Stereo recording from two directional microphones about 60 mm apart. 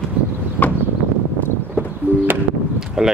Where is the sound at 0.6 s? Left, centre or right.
Left.